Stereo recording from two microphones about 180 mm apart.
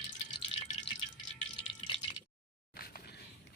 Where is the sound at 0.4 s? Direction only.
30° left (ahead or behind).